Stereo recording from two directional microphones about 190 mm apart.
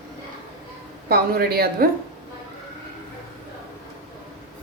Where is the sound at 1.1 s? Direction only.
55° right (ahead or behind).